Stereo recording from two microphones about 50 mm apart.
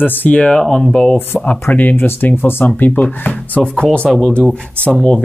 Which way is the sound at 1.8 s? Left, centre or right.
Left.